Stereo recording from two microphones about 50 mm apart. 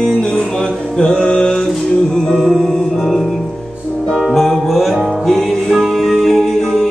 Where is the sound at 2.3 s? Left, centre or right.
Centre.